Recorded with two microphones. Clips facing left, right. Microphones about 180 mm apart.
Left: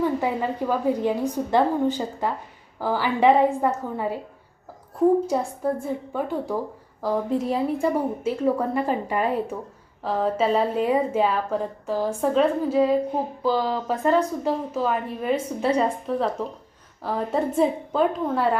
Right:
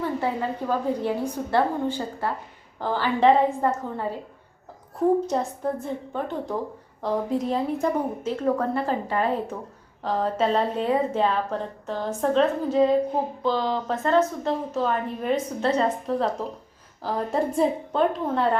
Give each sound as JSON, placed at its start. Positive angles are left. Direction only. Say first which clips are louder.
{"t": 0.0, "sound": "a woman's voice", "louder": "left 3 dB", "side_deg": 15}
{"t": 5.3, "sound": "a woman's voice", "louder": "left 2 dB", "side_deg": 10}